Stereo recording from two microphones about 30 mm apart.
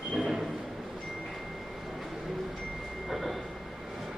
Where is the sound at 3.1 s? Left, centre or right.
Centre.